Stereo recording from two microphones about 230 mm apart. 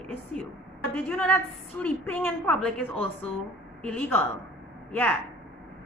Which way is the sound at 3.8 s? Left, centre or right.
Centre.